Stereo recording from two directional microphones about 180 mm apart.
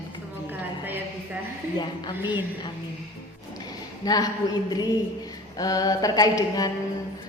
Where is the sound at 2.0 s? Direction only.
25° left (ahead or behind).